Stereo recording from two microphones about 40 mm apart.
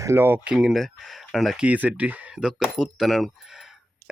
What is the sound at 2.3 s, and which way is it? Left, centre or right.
Speech, centre.